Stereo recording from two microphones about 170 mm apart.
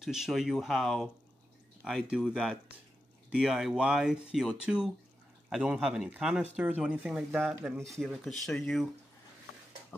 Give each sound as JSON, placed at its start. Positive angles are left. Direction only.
{"t": 0.0, "sound": "speech", "side_deg": 0}